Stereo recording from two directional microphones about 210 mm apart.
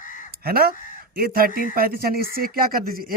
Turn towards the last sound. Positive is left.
turn(degrees=-45)  # may be behind; listen again after turning